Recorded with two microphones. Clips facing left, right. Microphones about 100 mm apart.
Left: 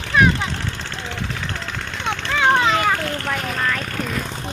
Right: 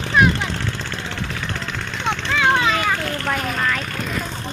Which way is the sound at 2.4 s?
30° left (ahead or behind).